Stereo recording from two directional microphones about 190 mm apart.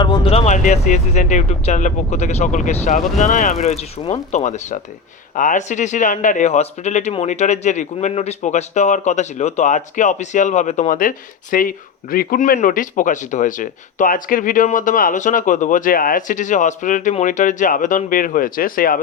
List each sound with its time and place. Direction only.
0.0 s speech: 25° left (ahead or behind); by 18.9 s 50° left (ahead or behind)